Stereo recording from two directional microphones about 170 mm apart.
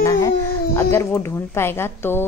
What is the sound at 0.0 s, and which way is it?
Speech, 20° left (ahead or behind).